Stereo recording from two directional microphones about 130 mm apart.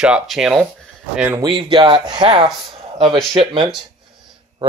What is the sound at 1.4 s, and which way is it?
Speech, 40° right (ahead or behind).